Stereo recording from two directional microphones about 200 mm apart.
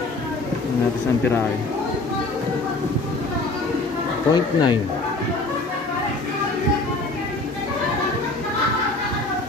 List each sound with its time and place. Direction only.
4.3 s speech: 20° left (ahead or behind)